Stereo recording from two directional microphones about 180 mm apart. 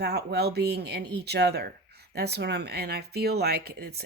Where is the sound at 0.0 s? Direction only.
65° right (ahead or behind).